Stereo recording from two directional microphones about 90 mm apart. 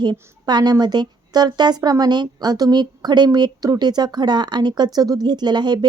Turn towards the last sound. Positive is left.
turn(degrees=-55)  # may be behind; listen again after turning